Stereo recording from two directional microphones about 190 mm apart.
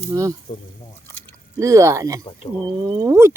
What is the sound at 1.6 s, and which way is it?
Speech, 15° right (ahead or behind).